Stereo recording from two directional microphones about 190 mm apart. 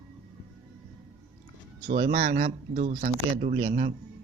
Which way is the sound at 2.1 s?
45° right (ahead or behind).